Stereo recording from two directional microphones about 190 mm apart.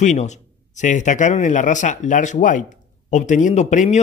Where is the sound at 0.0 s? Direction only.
40° left (ahead or behind).